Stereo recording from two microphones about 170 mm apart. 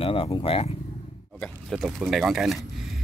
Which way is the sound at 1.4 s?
Centre (ahead or behind).